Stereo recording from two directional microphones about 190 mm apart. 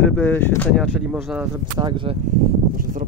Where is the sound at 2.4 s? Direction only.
50° right (ahead or behind).